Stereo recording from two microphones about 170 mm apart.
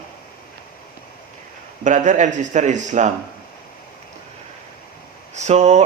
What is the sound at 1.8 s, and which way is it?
Speech, 45° right (ahead or behind).